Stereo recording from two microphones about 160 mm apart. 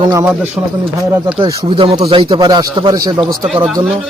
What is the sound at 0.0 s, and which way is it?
Speech, 20° right (ahead or behind).